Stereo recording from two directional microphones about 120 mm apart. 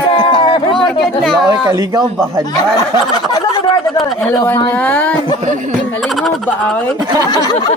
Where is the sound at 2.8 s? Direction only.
30° left (ahead or behind).